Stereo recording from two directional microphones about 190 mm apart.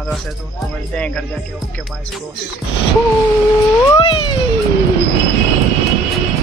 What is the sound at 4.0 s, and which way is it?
Cat, 25° left (ahead or behind).